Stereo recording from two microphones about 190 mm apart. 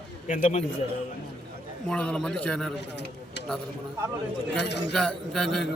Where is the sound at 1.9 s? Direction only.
5° left (ahead or behind).